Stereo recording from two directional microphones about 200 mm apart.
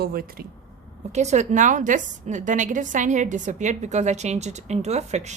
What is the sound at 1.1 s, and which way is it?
A woman's voice, 35° right (ahead or behind).